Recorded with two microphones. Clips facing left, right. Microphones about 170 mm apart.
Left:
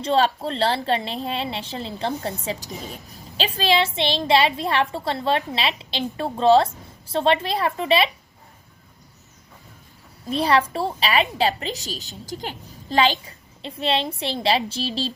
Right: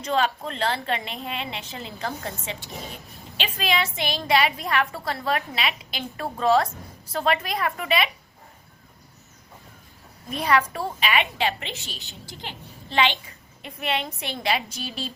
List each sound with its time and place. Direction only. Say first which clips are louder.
0.0 s a woman's voice: left 4 dB; 30° left (ahead or behind)
10.2 s a woman's voice: left 3 dB; 30° left (ahead or behind)